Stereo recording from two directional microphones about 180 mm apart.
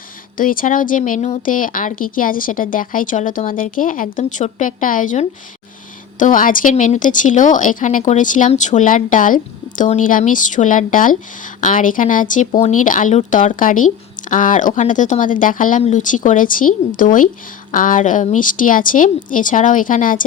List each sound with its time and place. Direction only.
0.3 s a woman's voice: 50° left (ahead or behind)